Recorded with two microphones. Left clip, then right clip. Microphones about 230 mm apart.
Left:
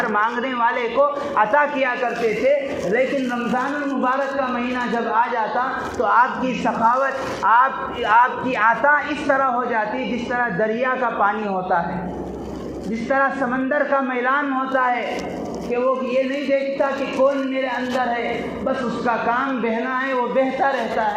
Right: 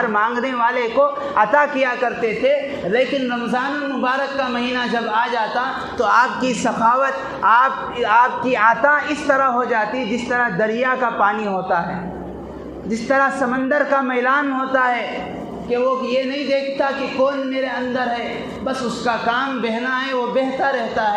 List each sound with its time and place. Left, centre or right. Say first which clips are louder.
0.0 s a woman's voice: right 2 dB; right
3.5 s a woman's voice: even; right
13.1 s a woman's voice: right 2 dB; right
16.5 s a woman's voice: right 2 dB; right
19.0 s a woman's voice: right 1 dB; right